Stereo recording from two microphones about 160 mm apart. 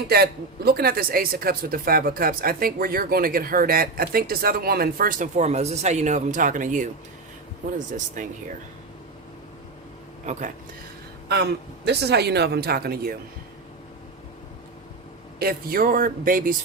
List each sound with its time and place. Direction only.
0.1 s speech: 75° right (ahead or behind); by 8.3 s 50° right (ahead or behind)
10.3 s speech: 45° right (ahead or behind)
11.9 s speech: 90° right; by 13.1 s 70° right (ahead or behind)
15.4 s speech: 65° right (ahead or behind)